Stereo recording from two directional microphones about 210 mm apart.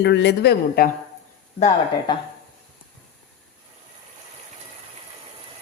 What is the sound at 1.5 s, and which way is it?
Speech, 30° left (ahead or behind).